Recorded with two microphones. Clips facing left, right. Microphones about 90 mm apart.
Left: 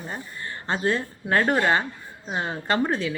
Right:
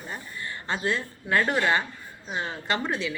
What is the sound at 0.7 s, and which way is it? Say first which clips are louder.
Speech: left 4 dB; 40° left (ahead or behind).